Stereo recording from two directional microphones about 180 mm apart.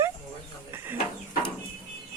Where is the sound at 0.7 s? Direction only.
15° right (ahead or behind).